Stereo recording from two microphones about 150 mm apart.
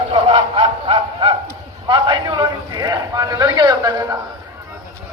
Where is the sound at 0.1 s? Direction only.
35° right (ahead or behind).